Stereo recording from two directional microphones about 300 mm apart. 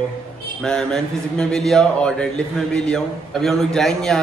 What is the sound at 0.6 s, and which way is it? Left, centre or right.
A man's voice, centre.